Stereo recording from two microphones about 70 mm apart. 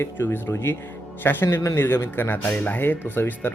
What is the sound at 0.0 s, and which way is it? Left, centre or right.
A man's voice, left.